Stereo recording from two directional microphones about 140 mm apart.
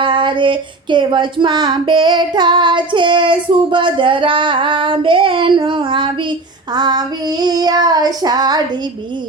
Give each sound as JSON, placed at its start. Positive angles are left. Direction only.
{"t": 0.0, "sound": "child singing", "side_deg": -35}